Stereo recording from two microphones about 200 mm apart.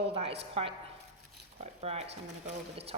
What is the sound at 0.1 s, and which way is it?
Speech, 30° right (ahead or behind).